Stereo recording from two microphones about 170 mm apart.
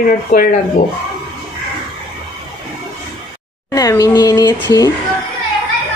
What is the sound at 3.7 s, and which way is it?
Speech, 20° left (ahead or behind).